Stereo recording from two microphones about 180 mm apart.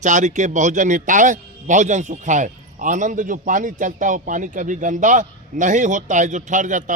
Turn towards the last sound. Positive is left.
turn(degrees=-45)  # may be behind; listen again after turning